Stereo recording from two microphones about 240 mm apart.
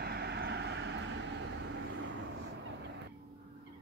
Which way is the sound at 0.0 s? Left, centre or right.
Right.